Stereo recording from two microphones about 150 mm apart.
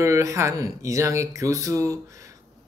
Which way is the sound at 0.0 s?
20° right (ahead or behind).